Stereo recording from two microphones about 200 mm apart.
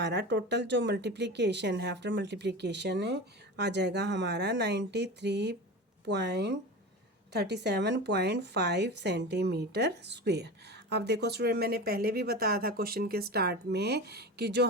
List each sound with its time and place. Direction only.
0.0 s speech: 60° right (ahead or behind)